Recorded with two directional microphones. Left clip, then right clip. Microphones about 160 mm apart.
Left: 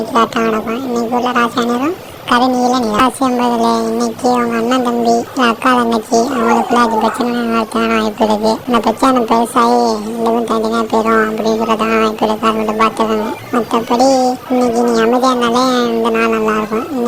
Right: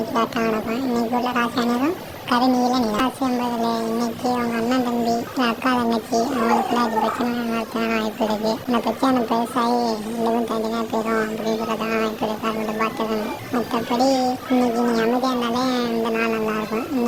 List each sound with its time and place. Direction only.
0.1 s speech: 30° left (ahead or behind)